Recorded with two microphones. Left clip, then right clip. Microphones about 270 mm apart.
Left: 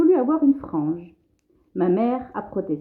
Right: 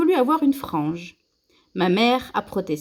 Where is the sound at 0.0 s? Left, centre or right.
Right.